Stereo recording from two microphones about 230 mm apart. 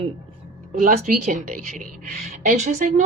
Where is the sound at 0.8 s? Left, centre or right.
Right.